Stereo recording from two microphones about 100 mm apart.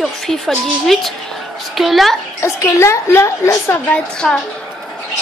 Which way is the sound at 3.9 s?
5° left (ahead or behind).